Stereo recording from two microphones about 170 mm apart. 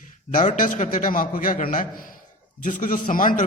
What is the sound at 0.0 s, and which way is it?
A man's voice, 50° left (ahead or behind).